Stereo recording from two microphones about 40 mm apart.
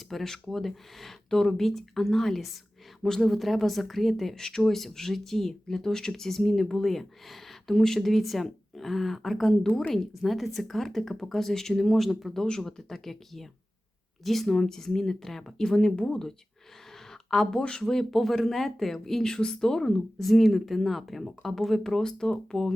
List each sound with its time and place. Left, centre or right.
0.1 s speech: centre
4.4 s speech: centre
12.4 s speech: centre
17.1 s a sound: centre
17.6 s speech: left
17.8 s speech: centre